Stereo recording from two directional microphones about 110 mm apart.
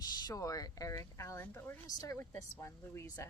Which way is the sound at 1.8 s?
35° left (ahead or behind).